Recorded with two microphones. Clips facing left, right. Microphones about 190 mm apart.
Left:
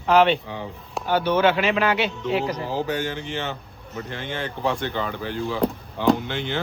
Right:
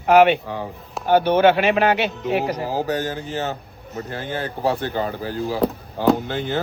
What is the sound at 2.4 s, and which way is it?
A man's voice, 40° right (ahead or behind).